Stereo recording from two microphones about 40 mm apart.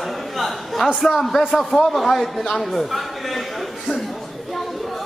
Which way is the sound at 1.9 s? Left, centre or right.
Centre.